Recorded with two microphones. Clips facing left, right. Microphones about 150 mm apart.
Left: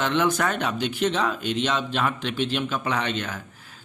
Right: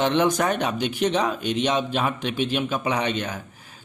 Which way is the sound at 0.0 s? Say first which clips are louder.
Right 2 dB; 20° right (ahead or behind).